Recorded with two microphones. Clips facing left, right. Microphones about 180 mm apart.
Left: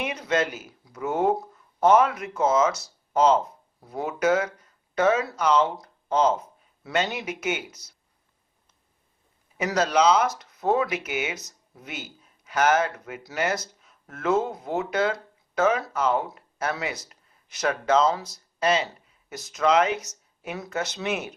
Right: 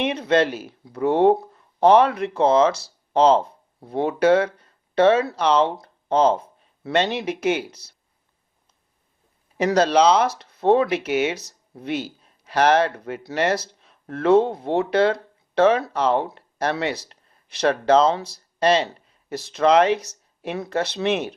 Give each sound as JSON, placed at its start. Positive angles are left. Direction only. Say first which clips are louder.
{"t": 0.0, "sound": "speech", "louder": "right 6 dB", "side_deg": -30}
{"t": 9.6, "sound": "speech", "louder": "right 5 dB", "side_deg": -30}